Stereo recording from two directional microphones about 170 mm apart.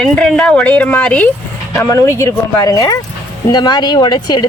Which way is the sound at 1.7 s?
20° left (ahead or behind).